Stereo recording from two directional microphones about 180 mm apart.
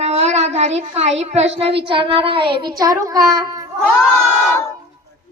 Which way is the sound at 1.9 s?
30° right (ahead or behind).